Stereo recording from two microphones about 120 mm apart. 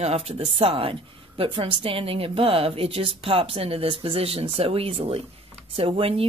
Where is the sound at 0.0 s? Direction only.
60° right (ahead or behind).